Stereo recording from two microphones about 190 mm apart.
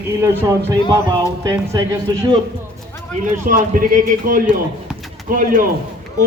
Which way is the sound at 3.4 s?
45° right (ahead or behind).